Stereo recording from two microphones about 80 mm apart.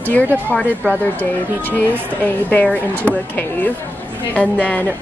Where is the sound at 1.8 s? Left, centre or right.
Centre.